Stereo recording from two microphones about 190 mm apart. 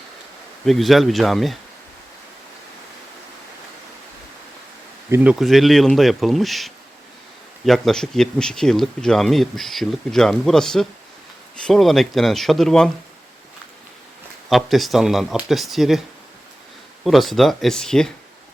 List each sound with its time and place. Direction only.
0.6 s speech: centre (ahead or behind)
5.1 s speech: 5° right (ahead or behind)
14.5 s speech: centre (ahead or behind)
17.0 s speech: centre (ahead or behind)